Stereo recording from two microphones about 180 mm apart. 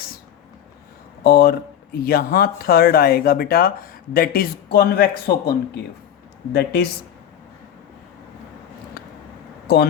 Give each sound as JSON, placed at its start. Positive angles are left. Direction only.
{"t": 1.2, "sound": "speech", "side_deg": 60}